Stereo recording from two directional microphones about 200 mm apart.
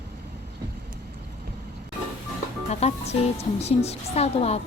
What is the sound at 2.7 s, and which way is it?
Speech, 30° left (ahead or behind).